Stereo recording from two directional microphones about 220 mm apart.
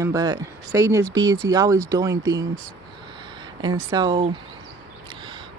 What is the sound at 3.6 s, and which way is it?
Speech, 20° right (ahead or behind).